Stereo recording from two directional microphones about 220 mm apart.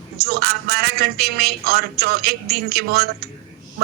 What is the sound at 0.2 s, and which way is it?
Speech, 45° right (ahead or behind).